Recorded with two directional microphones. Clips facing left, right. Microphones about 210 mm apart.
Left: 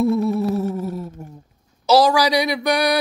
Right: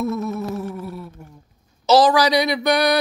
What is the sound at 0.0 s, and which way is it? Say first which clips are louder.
Music: left 6 dB; 30° left (ahead or behind).